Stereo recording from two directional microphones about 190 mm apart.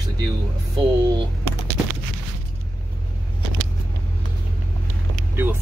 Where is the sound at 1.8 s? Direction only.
10° right (ahead or behind).